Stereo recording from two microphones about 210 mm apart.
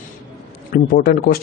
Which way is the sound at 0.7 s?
45° left (ahead or behind).